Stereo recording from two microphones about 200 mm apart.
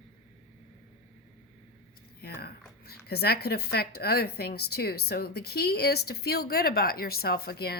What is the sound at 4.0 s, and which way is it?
A woman's voice, 50° left (ahead or behind).